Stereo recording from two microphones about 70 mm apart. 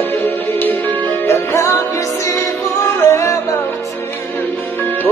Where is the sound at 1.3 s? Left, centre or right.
Left.